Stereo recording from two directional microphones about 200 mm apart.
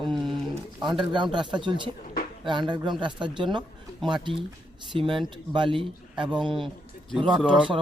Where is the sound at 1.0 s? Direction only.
25° right (ahead or behind).